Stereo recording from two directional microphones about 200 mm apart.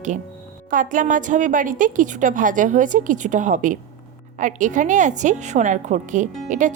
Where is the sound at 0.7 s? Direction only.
40° right (ahead or behind).